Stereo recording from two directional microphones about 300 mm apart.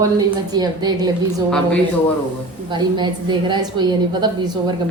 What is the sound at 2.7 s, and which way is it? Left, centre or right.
A woman's voice, centre.